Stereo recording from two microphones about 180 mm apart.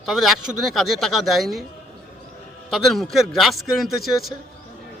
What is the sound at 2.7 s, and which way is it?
Speech, centre (ahead or behind).